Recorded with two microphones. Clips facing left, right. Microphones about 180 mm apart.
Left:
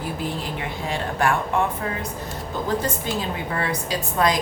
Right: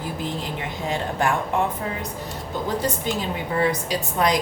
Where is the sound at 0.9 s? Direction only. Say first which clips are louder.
Left 1 dB; 20° right (ahead or behind).